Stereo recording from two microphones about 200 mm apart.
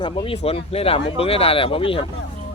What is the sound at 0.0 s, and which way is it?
Speech, 25° left (ahead or behind).